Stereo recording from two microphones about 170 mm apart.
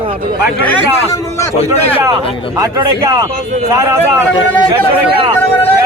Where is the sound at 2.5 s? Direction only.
20° right (ahead or behind).